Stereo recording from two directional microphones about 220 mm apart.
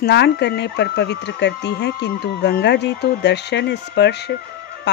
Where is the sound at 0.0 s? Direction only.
50° left (ahead or behind).